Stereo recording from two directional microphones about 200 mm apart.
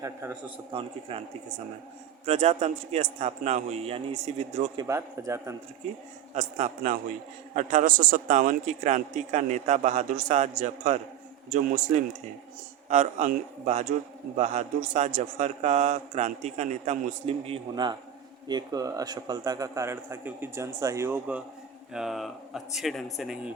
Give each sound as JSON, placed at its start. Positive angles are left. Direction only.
{"t": 0.0, "sound": "a man's voice", "side_deg": -10}
{"t": 0.7, "sound": "a man's voice", "side_deg": -25}
{"t": 4.8, "sound": "a man's voice", "side_deg": -15}
{"t": 6.3, "sound": "a man's voice", "side_deg": -35}